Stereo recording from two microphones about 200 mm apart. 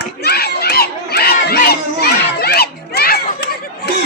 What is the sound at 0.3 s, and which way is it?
Crowd, 50° left (ahead or behind).